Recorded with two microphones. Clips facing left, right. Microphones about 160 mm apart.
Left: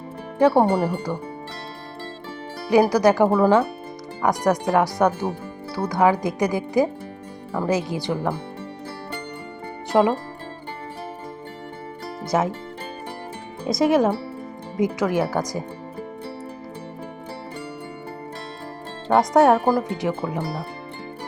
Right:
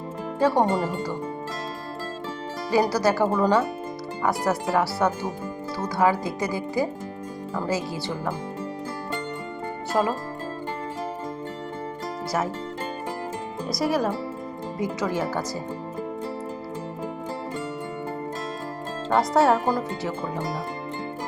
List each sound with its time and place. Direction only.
0.3 s speech: 10° left (ahead or behind)
2.8 s speech: 15° left (ahead or behind)
9.9 s speech: 15° left (ahead or behind)
13.7 s speech: 20° left (ahead or behind)
19.0 s speech: 15° left (ahead or behind)